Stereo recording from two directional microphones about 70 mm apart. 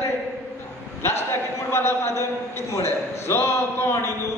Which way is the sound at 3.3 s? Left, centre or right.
Left.